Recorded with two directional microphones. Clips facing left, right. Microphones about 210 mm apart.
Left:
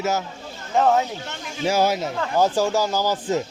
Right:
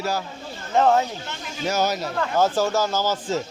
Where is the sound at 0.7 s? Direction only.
Centre (ahead or behind).